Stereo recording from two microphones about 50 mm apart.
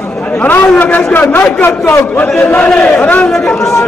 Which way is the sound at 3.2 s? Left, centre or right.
Centre.